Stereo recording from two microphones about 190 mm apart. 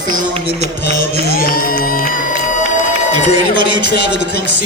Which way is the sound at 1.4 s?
50° left (ahead or behind).